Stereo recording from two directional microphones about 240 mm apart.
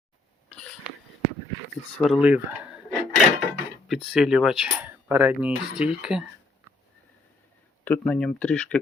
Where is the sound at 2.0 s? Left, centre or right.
Centre.